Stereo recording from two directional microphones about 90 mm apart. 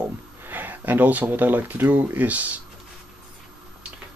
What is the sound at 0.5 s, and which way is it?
Speech, 20° right (ahead or behind).